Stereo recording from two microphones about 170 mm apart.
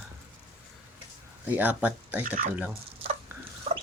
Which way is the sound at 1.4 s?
10° right (ahead or behind).